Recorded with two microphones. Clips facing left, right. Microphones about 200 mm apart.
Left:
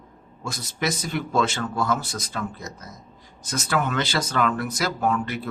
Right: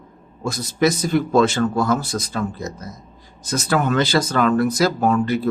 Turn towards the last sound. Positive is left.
turn(degrees=-35)  # may be behind; listen again after turning